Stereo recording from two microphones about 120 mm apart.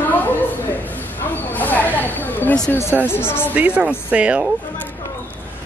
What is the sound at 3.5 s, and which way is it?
Speech, 10° right (ahead or behind).